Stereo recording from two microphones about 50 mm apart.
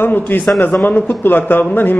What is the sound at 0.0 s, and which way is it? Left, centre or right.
A man's voice, left.